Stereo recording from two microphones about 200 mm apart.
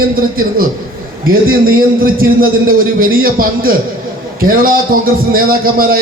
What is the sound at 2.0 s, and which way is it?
A man's voice, 45° right (ahead or behind).